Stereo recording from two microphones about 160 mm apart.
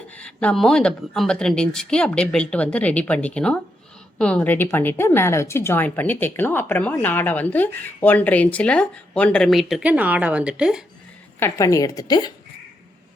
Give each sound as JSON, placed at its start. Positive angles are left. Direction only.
{"t": 0.1, "sound": "a woman's voice", "side_deg": 5}
{"t": 11.3, "sound": "a woman's voice", "side_deg": 15}